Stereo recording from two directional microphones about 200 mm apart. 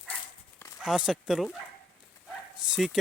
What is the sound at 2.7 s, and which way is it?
Speech, centre (ahead or behind).